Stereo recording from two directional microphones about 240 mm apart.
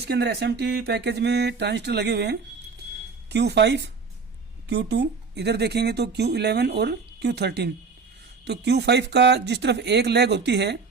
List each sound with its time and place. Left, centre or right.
0.1 s speech: right